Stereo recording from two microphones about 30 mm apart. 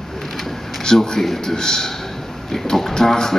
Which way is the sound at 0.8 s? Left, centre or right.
Centre.